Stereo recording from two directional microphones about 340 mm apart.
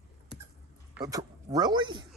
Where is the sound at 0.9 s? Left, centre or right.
Centre.